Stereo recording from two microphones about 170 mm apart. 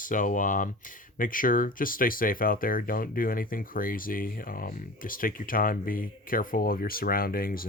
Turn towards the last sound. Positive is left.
turn(degrees=60)  # may be behind; listen again after turning